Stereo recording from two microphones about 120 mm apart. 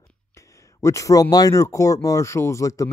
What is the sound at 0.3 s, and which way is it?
Speech, 25° left (ahead or behind).